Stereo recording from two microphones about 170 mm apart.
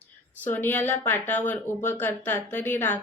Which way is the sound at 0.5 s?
10° left (ahead or behind).